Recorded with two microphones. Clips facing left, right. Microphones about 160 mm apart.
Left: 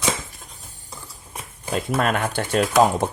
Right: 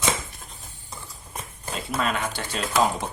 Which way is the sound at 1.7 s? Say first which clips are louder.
Left 6 dB; 50° left (ahead or behind).